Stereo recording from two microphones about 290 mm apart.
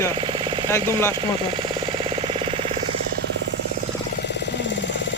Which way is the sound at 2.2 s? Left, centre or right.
Centre.